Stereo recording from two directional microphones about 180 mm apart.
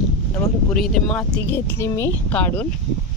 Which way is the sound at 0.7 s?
5° left (ahead or behind).